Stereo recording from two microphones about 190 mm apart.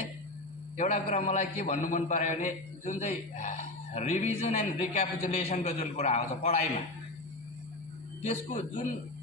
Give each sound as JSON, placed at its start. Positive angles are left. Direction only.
{"t": 0.7, "sound": "a man's voice", "side_deg": 40}
{"t": 8.2, "sound": "a man's voice", "side_deg": 40}